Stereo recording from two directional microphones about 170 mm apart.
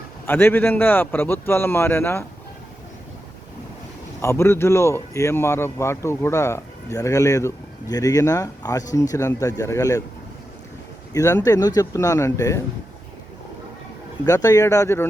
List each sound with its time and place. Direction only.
0.3 s a man's voice: 10° left (ahead or behind)
4.2 s a man's voice: 15° left (ahead or behind)
11.1 s speech: 20° left (ahead or behind)
14.3 s speech: 20° left (ahead or behind)